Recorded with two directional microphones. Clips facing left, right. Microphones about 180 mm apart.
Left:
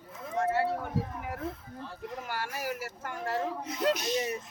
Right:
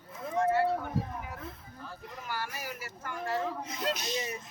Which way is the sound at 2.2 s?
60° left (ahead or behind).